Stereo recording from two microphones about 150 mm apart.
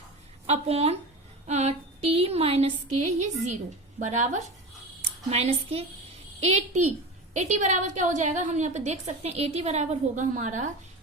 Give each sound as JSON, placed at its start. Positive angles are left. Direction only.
{"t": 0.4, "sound": "a woman's voice", "side_deg": -45}